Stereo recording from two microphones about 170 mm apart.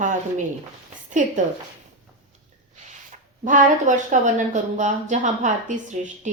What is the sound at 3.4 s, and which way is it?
A woman's voice, 50° right (ahead or behind).